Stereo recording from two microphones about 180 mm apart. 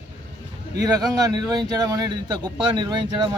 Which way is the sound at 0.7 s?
20° right (ahead or behind).